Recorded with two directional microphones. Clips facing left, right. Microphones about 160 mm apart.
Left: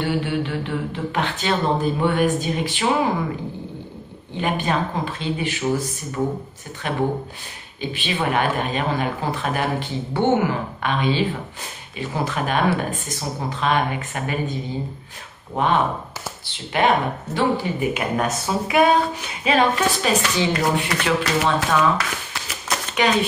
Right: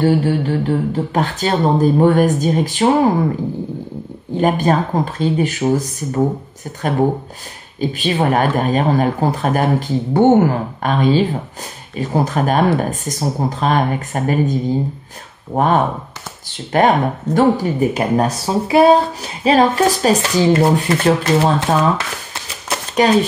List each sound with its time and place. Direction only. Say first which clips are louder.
0.0 s speech: right 7 dB; 40° right (ahead or behind)
4.3 s speech: right 8 dB; 40° right (ahead or behind)
7.8 s speech: right 7 dB; 40° right (ahead or behind)
23.0 s speech: right 6 dB; 40° right (ahead or behind)